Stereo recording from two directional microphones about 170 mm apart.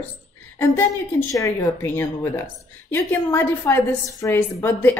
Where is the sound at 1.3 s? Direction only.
15° left (ahead or behind).